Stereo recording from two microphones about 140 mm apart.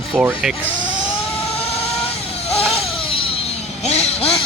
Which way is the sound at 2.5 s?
45° left (ahead or behind).